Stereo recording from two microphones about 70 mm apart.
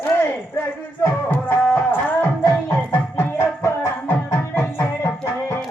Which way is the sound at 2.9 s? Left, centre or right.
Left.